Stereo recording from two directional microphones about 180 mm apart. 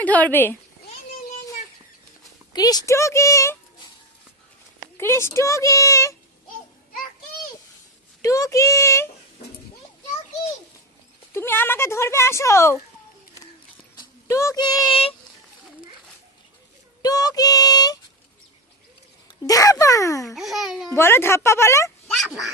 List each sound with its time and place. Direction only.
0.0 s speech: 10° left (ahead or behind)
2.5 s speech: 20° left (ahead or behind)
4.9 s speech: 15° left (ahead or behind)
8.2 s speech: 20° left (ahead or behind)
11.3 s speech: 10° left (ahead or behind)
14.3 s speech: 15° left (ahead or behind)
17.0 s speech: 20° left (ahead or behind)
19.5 s speech: 20° left (ahead or behind)
20.2 s a child's voice: centre (ahead or behind)
20.9 s speech: 15° left (ahead or behind)
22.0 s speech: centre (ahead or behind)